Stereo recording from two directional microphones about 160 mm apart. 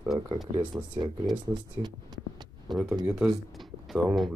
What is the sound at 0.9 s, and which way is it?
Speech, 30° right (ahead or behind).